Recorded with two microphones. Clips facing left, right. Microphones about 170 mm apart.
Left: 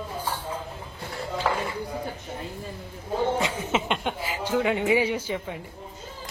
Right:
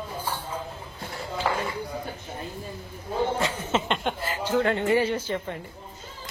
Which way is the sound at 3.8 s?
5° left (ahead or behind).